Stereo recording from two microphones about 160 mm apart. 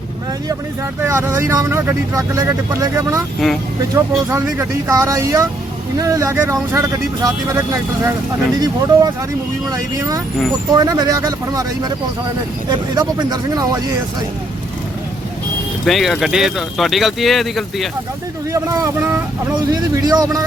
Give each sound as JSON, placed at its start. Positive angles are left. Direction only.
{"t": 1.0, "sound": "speech", "side_deg": -15}
{"t": 3.4, "sound": "speech", "side_deg": 0}
{"t": 3.9, "sound": "speech", "side_deg": -15}
{"t": 12.9, "sound": "speech", "side_deg": -25}
{"t": 15.9, "sound": "speech", "side_deg": 0}
{"t": 18.5, "sound": "speech", "side_deg": -20}